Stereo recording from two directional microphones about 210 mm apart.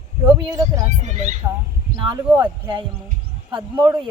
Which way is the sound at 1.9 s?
20° right (ahead or behind).